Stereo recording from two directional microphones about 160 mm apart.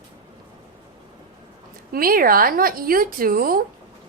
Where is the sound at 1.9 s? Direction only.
65° right (ahead or behind).